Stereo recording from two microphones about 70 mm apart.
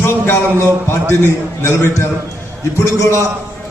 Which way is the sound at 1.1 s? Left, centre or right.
Left.